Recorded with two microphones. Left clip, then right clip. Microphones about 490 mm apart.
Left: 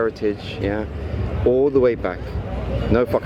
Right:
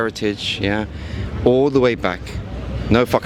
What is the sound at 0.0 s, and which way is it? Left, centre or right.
Speech, right.